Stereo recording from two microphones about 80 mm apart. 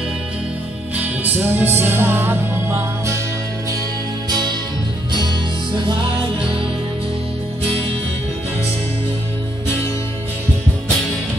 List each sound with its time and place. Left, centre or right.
0.9 s music: right